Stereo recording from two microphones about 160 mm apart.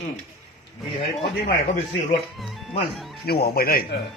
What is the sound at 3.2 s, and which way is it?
Speech, 85° left.